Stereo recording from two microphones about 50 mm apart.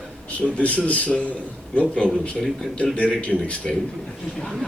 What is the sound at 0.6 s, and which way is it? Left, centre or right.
Speech, left.